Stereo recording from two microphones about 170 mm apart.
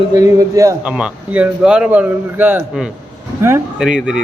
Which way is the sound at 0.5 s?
20° right (ahead or behind).